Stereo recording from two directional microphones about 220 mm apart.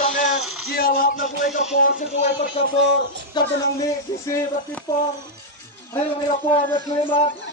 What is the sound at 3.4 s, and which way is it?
Speech, 20° left (ahead or behind).